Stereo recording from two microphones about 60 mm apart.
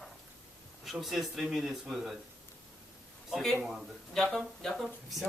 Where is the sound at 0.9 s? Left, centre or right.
Centre.